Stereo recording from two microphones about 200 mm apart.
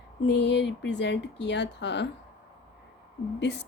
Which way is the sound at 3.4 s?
60° left (ahead or behind).